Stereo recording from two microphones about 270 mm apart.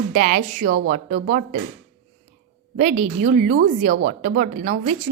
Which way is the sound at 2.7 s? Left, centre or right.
Right.